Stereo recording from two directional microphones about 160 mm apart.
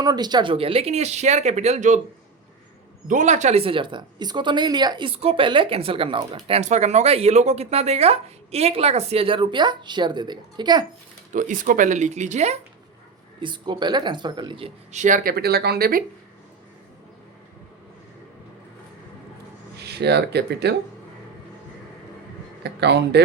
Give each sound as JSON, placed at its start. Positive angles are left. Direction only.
{"t": 0.0, "sound": "speech", "side_deg": -25}
{"t": 3.1, "sound": "speech", "side_deg": -50}
{"t": 6.6, "sound": "speech", "side_deg": -45}
{"t": 11.3, "sound": "speech", "side_deg": -55}
{"t": 13.4, "sound": "speech", "side_deg": -30}
{"t": 14.9, "sound": "speech", "side_deg": -55}
{"t": 19.7, "sound": "speech", "side_deg": -90}
{"t": 22.6, "sound": "speech", "side_deg": -90}